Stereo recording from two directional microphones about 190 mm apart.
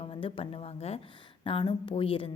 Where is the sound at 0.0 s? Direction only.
30° left (ahead or behind).